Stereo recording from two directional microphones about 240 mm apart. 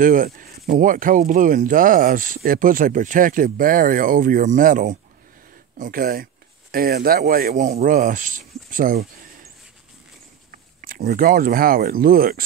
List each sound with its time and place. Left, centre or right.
0.0 s speech: right
10.5 s speech: right